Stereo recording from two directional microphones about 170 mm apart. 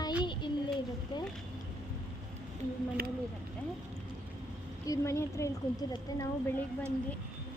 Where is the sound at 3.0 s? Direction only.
65° right (ahead or behind).